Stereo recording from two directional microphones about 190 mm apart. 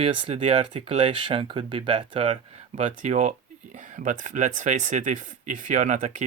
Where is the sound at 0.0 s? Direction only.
30° right (ahead or behind).